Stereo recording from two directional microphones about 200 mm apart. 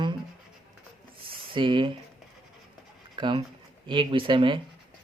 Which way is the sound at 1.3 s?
25° right (ahead or behind).